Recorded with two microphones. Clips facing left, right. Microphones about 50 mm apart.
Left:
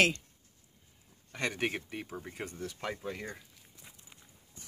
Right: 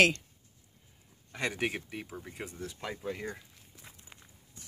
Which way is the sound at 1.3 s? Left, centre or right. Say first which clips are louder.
Even; centre.